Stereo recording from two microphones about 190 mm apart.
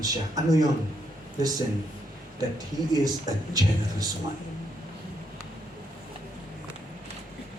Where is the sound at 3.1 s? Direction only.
20° right (ahead or behind).